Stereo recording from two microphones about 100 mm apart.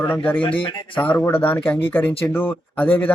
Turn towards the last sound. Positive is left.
turn(degrees=20)  # may be behind; listen again after turning